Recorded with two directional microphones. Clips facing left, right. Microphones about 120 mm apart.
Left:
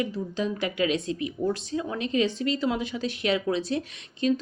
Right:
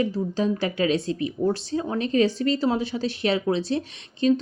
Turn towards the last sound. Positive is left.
turn(degrees=-35)  # may be behind; listen again after turning